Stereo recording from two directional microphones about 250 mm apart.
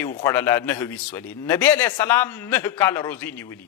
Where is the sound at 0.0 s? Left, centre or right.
Centre.